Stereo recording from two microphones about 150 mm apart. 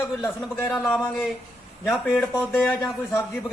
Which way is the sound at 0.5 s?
15° left (ahead or behind).